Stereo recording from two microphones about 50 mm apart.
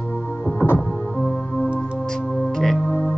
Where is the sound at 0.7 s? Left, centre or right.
Centre.